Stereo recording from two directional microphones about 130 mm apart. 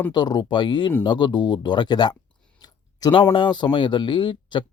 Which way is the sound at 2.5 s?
30° left (ahead or behind).